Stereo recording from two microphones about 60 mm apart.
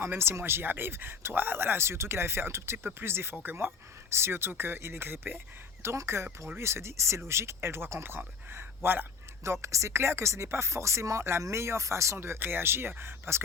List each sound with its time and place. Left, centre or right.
0.0 s speech: right
5.8 s a man's voice: right
9.4 s speech: right